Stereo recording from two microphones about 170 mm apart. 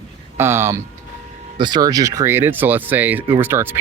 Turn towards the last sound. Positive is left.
turn(degrees=-15)  # may be behind; listen again after turning